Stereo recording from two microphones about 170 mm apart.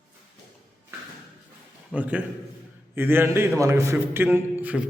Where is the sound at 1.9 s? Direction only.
10° right (ahead or behind).